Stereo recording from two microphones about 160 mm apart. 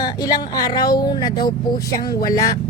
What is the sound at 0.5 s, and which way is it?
A woman's voice, 25° left (ahead or behind).